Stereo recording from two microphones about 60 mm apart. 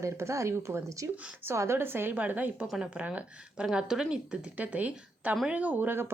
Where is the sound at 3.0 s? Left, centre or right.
Right.